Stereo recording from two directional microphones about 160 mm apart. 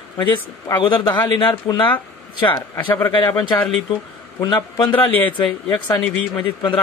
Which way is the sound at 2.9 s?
15° left (ahead or behind).